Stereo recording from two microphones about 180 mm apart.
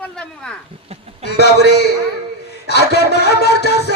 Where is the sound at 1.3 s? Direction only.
65° left (ahead or behind).